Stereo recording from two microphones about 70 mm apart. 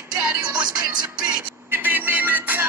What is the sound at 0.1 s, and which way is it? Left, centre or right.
Music, right.